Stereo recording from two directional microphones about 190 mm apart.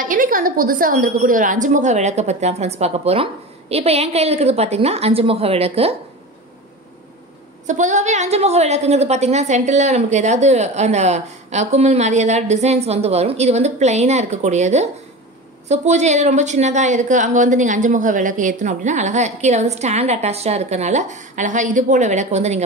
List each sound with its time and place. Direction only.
0.0 s a woman's voice: 45° right (ahead or behind)
7.6 s a woman's voice: 40° right (ahead or behind)